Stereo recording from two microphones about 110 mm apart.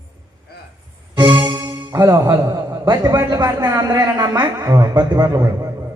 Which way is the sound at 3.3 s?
40° right (ahead or behind).